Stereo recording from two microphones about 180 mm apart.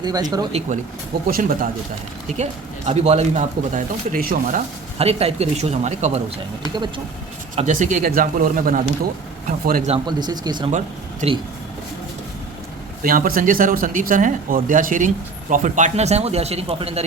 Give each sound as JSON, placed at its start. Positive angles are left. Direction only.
{"t": 0.0, "sound": "speech", "side_deg": -20}
{"t": 1.3, "sound": "speech", "side_deg": -50}
{"t": 2.4, "sound": "speech", "side_deg": -35}
{"t": 6.6, "sound": "speech", "side_deg": -25}
{"t": 7.5, "sound": "speech", "side_deg": -40}
{"t": 9.9, "sound": "speech", "side_deg": -25}
{"t": 10.7, "sound": "speech", "side_deg": -40}
{"t": 13.0, "sound": "speech", "side_deg": -50}